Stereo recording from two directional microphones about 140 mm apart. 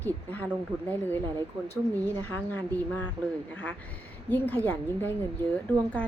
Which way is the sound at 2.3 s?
10° left (ahead or behind).